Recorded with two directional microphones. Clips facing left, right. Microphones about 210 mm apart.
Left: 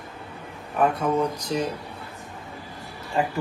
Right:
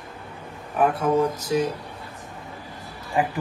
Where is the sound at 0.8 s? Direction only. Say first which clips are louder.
Right 2 dB; 5° right (ahead or behind).